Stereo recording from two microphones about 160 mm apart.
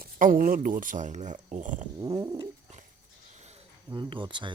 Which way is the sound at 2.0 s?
20° right (ahead or behind).